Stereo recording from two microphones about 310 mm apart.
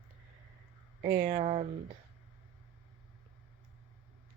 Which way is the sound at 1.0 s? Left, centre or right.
Centre.